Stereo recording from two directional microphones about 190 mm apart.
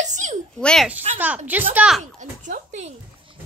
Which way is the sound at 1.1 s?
10° right (ahead or behind).